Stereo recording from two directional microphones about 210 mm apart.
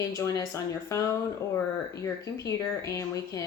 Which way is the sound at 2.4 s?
15° left (ahead or behind).